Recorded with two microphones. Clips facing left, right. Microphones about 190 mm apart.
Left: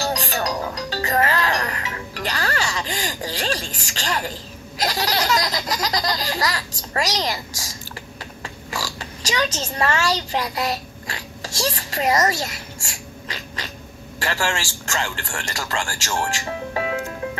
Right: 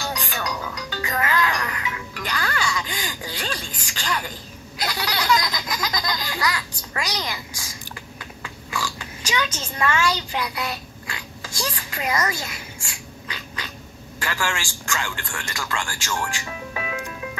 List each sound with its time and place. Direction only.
0.0 s music: 40° left (ahead or behind)
3.8 s a sound: 40° left (ahead or behind)
4.8 s baby laughter: 40° left (ahead or behind)
8.4 s oink: 40° left (ahead or behind)
14.2 s a man's voice: 40° left (ahead or behind)